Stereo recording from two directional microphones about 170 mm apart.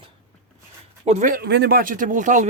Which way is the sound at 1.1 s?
50° right (ahead or behind).